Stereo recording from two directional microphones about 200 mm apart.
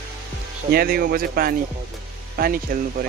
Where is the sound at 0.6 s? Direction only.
50° right (ahead or behind).